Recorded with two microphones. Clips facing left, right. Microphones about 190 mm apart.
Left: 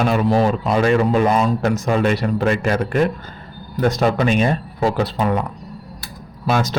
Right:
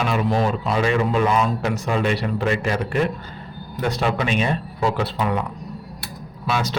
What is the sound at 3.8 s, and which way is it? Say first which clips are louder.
Speech: left 5 dB; 45° left (ahead or behind).